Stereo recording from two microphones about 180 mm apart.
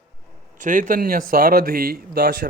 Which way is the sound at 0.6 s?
45° right (ahead or behind).